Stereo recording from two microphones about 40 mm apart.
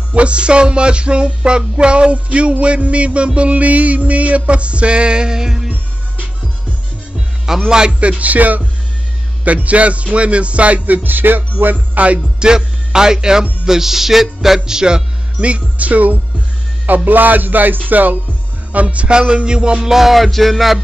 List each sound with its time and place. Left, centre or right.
0.1 s music: right
7.4 s speech: centre
8.0 s music: right
11.1 s music: right
11.6 s music: right
12.4 s speech: centre
15.3 s music: right
18.7 s speech: right
19.1 s music: right
19.9 s music: centre